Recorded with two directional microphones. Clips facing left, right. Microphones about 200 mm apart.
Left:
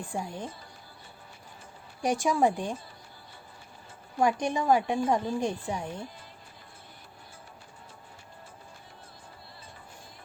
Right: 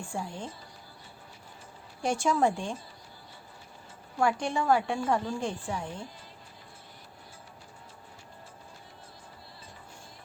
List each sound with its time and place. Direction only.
0.1 s speech: 20° left (ahead or behind)
2.0 s a woman's voice: 15° left (ahead or behind)
4.2 s a woman's voice: 20° left (ahead or behind)